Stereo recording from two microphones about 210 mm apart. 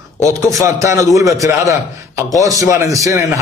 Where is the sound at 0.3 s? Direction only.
15° right (ahead or behind).